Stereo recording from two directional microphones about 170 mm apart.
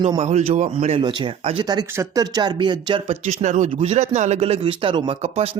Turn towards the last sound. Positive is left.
turn(degrees=-35)  # may be behind; listen again after turning